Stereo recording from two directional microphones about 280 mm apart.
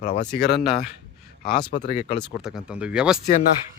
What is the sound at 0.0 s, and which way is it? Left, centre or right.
Speech, left.